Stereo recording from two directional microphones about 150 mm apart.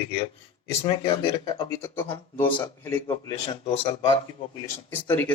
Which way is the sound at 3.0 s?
30° left (ahead or behind).